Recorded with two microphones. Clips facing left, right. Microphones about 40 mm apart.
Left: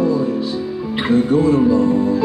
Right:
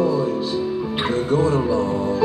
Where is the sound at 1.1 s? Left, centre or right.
Left.